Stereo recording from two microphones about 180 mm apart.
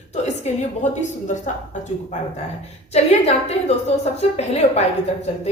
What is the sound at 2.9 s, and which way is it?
Speech, 35° left (ahead or behind).